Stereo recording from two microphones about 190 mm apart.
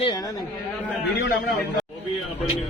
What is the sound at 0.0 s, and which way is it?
Speech, 20° left (ahead or behind).